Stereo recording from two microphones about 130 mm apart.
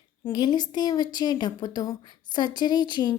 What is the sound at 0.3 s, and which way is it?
A woman's voice, 30° left (ahead or behind).